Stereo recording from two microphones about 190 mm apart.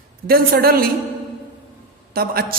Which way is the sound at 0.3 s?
50° right (ahead or behind).